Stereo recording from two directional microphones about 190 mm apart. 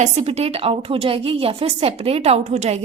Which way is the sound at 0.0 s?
35° right (ahead or behind).